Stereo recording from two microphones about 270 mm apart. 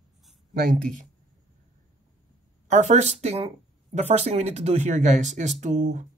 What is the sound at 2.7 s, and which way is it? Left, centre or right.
Speech, right.